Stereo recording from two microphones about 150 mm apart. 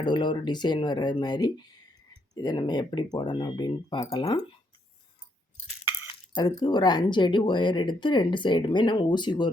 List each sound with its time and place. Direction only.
0.0 s speech: 30° left (ahead or behind)
6.1 s speech: 30° left (ahead or behind)